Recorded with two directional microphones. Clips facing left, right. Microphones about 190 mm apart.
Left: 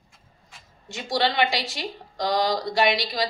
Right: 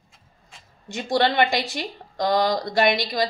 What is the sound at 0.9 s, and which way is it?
Speech, 50° right (ahead or behind).